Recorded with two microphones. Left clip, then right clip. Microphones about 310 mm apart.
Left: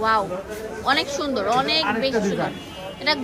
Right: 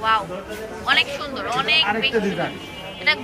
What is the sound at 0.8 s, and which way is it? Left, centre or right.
Speech, centre.